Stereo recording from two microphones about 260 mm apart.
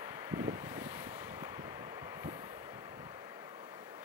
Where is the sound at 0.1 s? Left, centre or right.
Centre.